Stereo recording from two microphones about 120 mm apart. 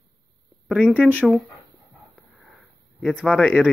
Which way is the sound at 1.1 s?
Centre (ahead or behind).